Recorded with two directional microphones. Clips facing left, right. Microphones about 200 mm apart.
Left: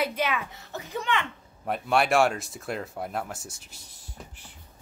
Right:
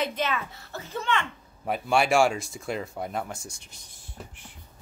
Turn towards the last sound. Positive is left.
turn(degrees=0)  # may be behind; listen again after turning